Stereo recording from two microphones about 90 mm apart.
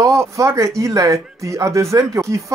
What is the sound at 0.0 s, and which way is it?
Speech, 35° right (ahead or behind).